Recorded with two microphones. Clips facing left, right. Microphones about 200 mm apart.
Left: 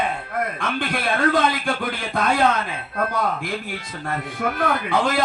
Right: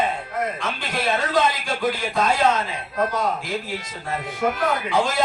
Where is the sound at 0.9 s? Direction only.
25° right (ahead or behind).